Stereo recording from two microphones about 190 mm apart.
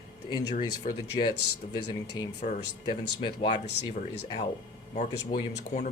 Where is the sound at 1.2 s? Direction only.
25° left (ahead or behind).